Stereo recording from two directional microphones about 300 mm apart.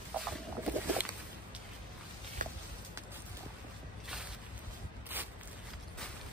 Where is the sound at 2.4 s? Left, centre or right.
Right.